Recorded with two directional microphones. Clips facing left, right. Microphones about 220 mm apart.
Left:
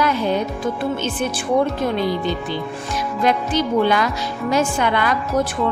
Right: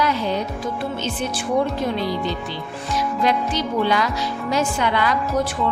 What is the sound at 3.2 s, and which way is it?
A woman's voice, 50° left (ahead or behind).